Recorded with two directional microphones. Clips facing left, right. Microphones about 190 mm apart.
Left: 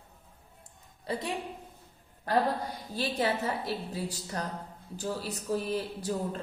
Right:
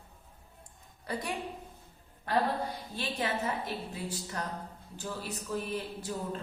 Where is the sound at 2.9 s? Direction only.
35° left (ahead or behind).